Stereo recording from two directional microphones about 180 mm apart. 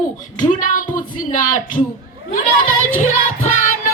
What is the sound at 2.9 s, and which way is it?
Speech, 45° left (ahead or behind).